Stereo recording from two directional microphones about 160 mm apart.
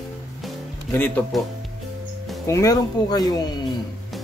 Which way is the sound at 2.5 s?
20° left (ahead or behind).